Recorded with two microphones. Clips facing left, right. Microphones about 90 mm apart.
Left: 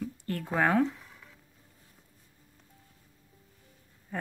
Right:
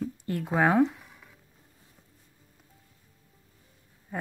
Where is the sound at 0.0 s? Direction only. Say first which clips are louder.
Right 3 dB; 15° right (ahead or behind).